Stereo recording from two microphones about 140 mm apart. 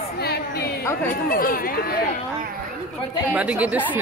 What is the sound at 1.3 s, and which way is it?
Speech, 90° left.